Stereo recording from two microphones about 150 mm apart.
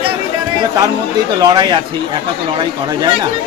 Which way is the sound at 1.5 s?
25° right (ahead or behind).